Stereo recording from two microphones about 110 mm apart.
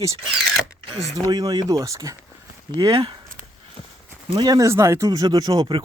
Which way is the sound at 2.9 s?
45° right (ahead or behind).